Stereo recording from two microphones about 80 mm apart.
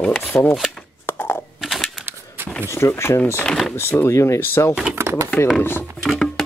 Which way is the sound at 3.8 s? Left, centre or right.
Left.